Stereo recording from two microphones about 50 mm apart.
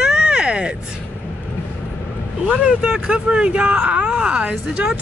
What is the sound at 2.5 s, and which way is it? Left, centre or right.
Speech, centre.